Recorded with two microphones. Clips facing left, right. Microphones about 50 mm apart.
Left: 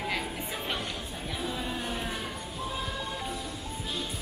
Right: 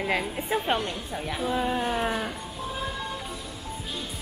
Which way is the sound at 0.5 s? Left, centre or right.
Right.